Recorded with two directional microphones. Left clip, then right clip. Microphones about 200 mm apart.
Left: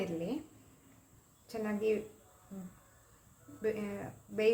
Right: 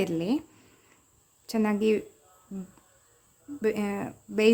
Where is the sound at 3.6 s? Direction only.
50° right (ahead or behind).